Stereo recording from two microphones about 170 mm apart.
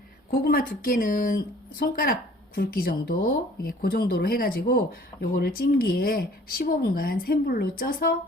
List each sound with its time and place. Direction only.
0.3 s speech: 60° left (ahead or behind)